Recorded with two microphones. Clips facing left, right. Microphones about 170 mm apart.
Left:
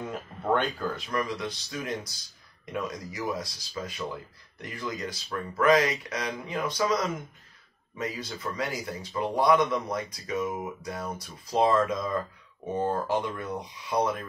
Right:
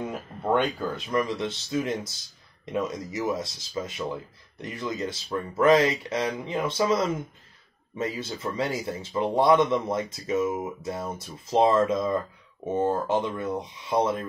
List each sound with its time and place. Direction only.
0.0 s speech: 15° right (ahead or behind)